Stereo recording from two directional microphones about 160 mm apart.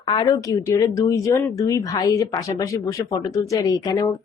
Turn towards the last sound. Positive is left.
turn(degrees=25)  # may be behind; listen again after turning